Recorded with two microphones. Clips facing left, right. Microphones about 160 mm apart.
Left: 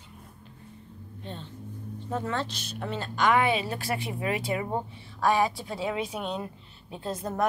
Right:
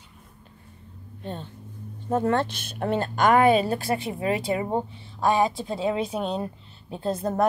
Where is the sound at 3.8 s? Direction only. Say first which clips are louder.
Right 4 dB; 30° right (ahead or behind).